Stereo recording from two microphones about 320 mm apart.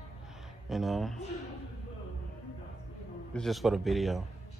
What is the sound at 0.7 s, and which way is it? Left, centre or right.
Speech, centre.